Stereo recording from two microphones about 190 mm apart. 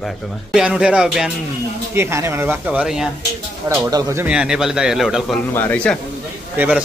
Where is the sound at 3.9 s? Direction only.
20° right (ahead or behind).